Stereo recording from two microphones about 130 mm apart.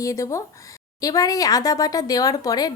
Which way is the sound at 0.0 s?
25° left (ahead or behind).